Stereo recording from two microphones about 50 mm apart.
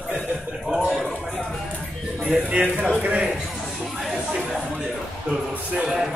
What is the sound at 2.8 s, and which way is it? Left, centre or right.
Speech, right.